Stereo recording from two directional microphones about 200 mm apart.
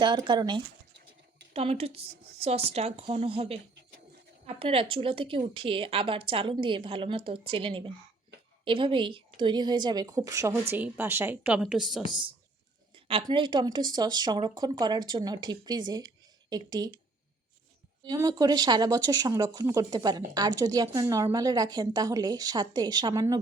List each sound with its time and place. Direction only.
0.0 s a woman's voice: 25° right (ahead or behind); by 12.0 s centre (ahead or behind)
12.9 s speech: 25° right (ahead or behind)
18.0 s speech: 20° right (ahead or behind)